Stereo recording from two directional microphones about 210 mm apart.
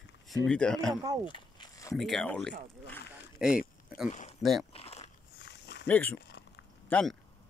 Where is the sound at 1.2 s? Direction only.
20° left (ahead or behind).